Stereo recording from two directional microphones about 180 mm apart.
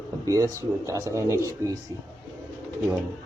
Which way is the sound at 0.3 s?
20° right (ahead or behind).